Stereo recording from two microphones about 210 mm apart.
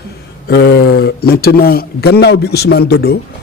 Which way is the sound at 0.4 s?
50° left (ahead or behind).